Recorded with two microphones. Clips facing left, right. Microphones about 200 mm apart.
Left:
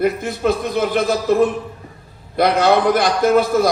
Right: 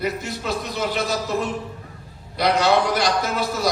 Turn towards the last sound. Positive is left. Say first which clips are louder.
# left 10 dB
turn(degrees=50)  # may be behind; listen again after turning